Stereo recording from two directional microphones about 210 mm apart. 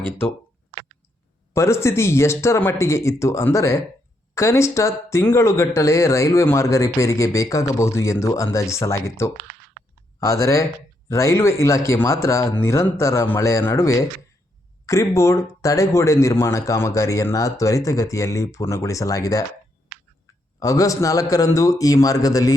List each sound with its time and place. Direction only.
1.5 s a man's voice: 15° left (ahead or behind)
20.6 s a man's voice: 15° left (ahead or behind)